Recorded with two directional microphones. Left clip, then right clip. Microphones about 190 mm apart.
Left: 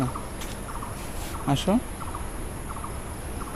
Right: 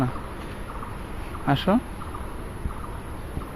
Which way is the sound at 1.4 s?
Centre (ahead or behind).